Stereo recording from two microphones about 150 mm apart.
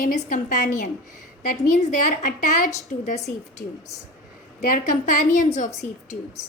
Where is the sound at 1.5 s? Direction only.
55° left (ahead or behind).